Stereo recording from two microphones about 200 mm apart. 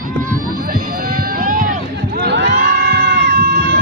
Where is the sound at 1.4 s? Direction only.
45° right (ahead or behind).